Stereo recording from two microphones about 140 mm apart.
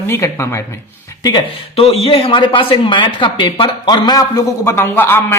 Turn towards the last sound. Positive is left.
turn(degrees=15)  # may be behind; listen again after turning